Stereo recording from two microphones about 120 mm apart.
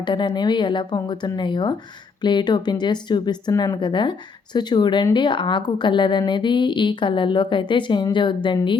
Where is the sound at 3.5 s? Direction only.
30° left (ahead or behind).